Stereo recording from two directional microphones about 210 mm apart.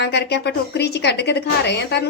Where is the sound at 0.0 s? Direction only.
55° left (ahead or behind).